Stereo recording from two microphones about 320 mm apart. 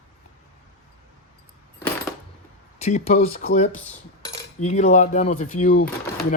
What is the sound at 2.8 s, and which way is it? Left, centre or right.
Speech, centre.